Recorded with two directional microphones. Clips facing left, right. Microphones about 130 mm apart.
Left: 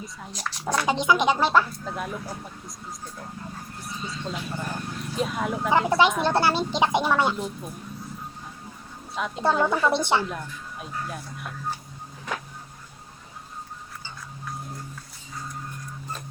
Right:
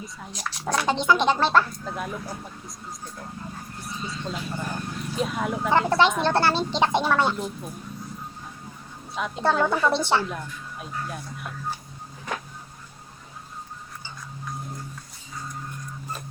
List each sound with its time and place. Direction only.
0.0 s speech: centre (ahead or behind)
3.8 s speech: centre (ahead or behind)
9.1 s speech: centre (ahead or behind)
9.9 s a woman's voice: 15° left (ahead or behind)
10.2 s speech: centre (ahead or behind)